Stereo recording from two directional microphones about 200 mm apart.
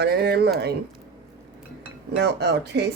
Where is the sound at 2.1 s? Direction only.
60° right (ahead or behind).